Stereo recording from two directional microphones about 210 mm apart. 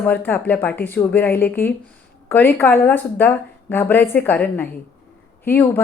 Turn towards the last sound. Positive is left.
turn(degrees=10)  # may be behind; listen again after turning